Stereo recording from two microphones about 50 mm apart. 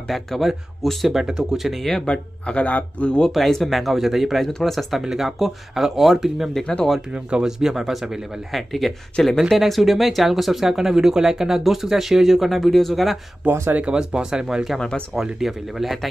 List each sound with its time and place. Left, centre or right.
0.1 s speech: centre
2.0 s speech: left
3.3 s speech: centre
7.1 s speech: right
7.4 s speech: centre
13.4 s speech: right
13.8 s speech: centre
14.8 s speech: centre
15.3 s speech: centre